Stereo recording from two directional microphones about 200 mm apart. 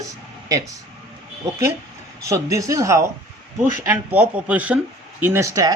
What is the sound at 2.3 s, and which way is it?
Speech, 15° right (ahead or behind).